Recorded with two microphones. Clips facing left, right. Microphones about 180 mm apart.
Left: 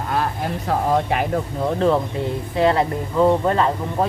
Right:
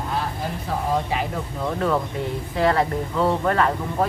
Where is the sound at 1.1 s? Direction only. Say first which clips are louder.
Left 4 dB; 60° left (ahead or behind).